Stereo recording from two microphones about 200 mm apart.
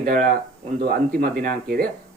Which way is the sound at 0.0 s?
40° right (ahead or behind).